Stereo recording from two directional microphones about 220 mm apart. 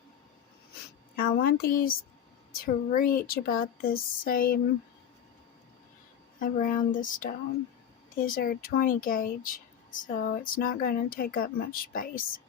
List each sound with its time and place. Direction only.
1.2 s speech: 45° left (ahead or behind)
6.4 s speech: 40° left (ahead or behind)